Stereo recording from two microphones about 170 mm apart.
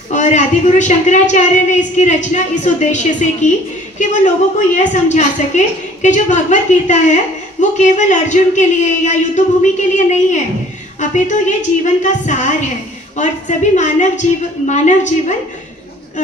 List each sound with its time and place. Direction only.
0.1 s a woman's voice: 45° left (ahead or behind)